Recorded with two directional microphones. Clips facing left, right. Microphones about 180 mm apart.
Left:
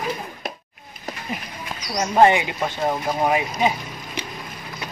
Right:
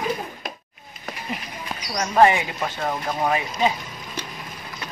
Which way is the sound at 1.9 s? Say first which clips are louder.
Left 1 dB; 20° left (ahead or behind).